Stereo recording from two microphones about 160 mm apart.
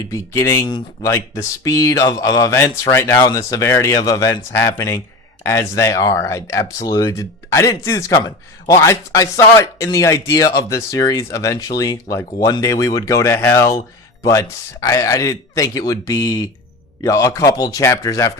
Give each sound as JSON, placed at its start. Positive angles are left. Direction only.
{"t": 0.1, "sound": "speech", "side_deg": 20}